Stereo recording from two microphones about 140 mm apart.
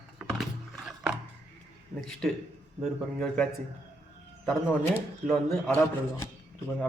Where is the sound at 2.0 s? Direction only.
5° left (ahead or behind).